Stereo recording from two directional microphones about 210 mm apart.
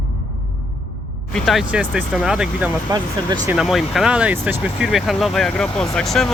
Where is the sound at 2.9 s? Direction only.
20° right (ahead or behind).